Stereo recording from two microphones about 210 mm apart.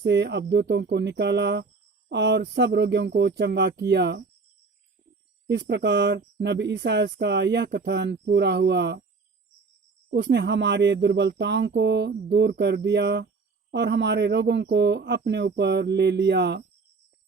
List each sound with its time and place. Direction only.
0.0 s speech: 55° right (ahead or behind)
5.5 s speech: 55° right (ahead or behind)
10.1 s speech: 55° right (ahead or behind)